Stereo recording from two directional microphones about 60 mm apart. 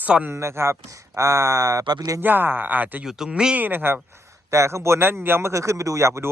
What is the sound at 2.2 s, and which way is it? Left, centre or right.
Speech, right.